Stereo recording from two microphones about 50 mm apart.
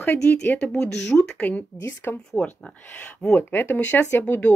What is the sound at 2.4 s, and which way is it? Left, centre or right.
Speech, left.